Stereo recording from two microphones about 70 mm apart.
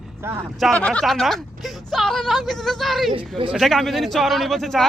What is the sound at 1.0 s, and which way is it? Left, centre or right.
Speech, centre.